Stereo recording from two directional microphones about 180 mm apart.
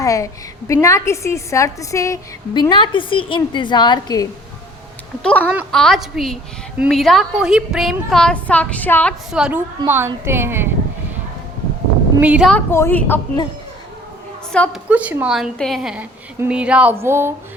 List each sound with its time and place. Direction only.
0.0 s a woman's voice: 20° left (ahead or behind)
5.2 s a woman's voice: 5° left (ahead or behind)
9.3 s a woman's voice: 5° right (ahead or behind)
12.2 s a woman's voice: 5° right (ahead or behind)
12.5 s a woman's voice: 10° left (ahead or behind)
14.5 s a woman's voice: 5° left (ahead or behind)
14.8 s a woman's voice: 10° right (ahead or behind)